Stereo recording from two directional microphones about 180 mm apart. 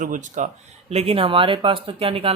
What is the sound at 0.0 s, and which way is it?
Speech, 45° right (ahead or behind).